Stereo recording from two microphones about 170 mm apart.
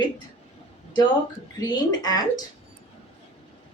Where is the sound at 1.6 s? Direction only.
25° left (ahead or behind).